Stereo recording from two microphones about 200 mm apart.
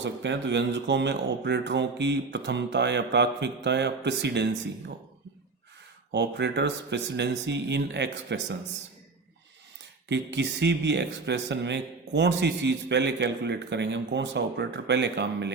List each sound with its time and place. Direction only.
0.0 s speech: 60° right (ahead or behind)
6.1 s speech: 60° right (ahead or behind)
10.1 s speech: 60° right (ahead or behind)